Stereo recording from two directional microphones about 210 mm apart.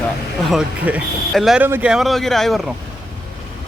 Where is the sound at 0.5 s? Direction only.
5° right (ahead or behind).